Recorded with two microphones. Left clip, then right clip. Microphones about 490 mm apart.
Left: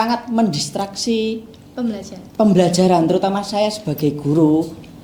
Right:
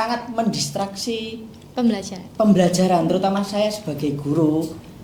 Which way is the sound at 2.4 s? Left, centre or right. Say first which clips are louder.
Left 3 dB; left.